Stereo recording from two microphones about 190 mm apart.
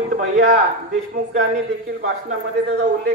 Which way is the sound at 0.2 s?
60° right (ahead or behind).